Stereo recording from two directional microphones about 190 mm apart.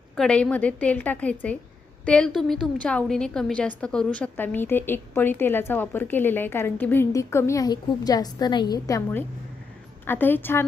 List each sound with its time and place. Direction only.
0.2 s a woman's voice: 5° left (ahead or behind)